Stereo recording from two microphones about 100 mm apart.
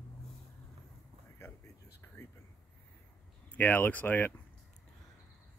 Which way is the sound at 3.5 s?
15° left (ahead or behind).